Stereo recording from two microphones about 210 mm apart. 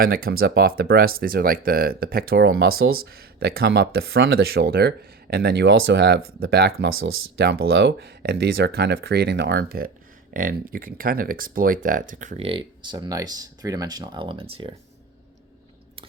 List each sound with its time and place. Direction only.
0.0 s speech: 45° right (ahead or behind); by 14.8 s 25° right (ahead or behind)